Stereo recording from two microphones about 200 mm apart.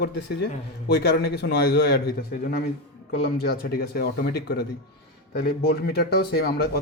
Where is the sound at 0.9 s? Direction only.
55° left (ahead or behind).